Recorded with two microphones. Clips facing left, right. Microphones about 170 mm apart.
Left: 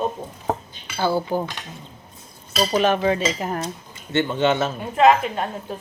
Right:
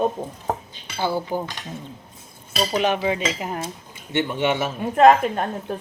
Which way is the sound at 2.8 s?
15° right (ahead or behind).